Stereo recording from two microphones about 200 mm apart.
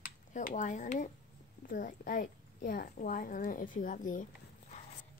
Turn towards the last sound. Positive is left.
turn(degrees=40)  # may be behind; listen again after turning